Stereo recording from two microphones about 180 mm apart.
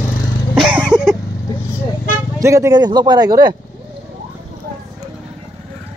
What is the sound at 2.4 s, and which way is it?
Speech, 15° right (ahead or behind).